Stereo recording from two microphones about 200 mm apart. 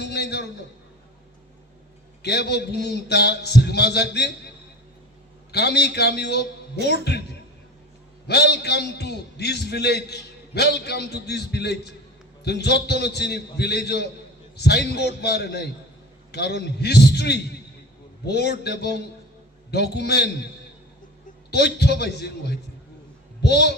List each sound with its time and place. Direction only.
0.0 s a sound: 55° left (ahead or behind)
2.2 s a man's voice: 55° left (ahead or behind)
5.5 s a man's voice: 55° left (ahead or behind)
8.3 s a man's voice: 55° left (ahead or behind)
21.5 s a man's voice: 55° left (ahead or behind)